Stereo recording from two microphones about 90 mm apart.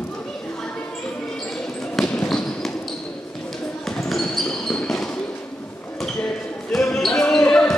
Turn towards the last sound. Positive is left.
turn(degrees=10)  # may be behind; listen again after turning